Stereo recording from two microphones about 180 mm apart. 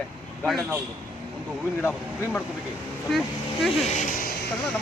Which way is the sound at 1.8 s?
10° left (ahead or behind).